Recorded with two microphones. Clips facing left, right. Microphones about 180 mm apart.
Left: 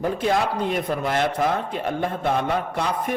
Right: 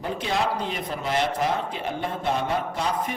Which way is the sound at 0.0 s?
50° left (ahead or behind).